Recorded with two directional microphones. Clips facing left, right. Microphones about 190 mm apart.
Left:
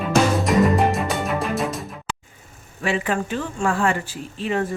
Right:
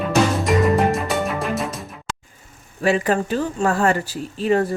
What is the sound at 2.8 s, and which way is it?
Speech, 40° right (ahead or behind).